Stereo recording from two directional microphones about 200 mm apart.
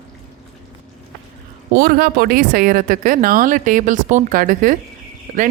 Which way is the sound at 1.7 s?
45° right (ahead or behind).